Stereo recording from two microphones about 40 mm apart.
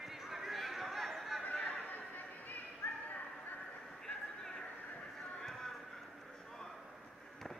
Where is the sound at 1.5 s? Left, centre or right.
Left.